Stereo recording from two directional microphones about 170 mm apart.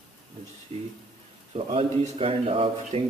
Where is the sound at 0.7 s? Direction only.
35° right (ahead or behind).